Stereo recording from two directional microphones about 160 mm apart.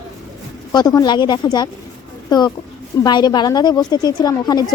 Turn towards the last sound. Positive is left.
turn(degrees=25)  # may be behind; listen again after turning